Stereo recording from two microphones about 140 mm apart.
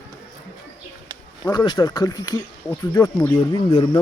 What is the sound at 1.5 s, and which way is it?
Speech, 30° left (ahead or behind).